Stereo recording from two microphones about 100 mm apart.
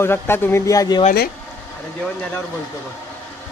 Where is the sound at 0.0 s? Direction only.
25° left (ahead or behind); by 1.0 s 40° left (ahead or behind).